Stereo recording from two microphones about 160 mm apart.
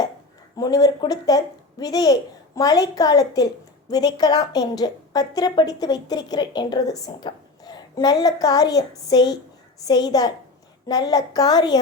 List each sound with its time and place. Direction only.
0.5 s a woman's voice: 25° left (ahead or behind)